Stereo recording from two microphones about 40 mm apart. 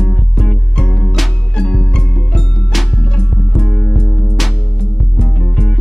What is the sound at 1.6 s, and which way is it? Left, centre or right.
Music, centre.